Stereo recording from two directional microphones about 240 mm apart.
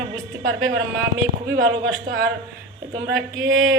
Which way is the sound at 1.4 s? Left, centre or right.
Right.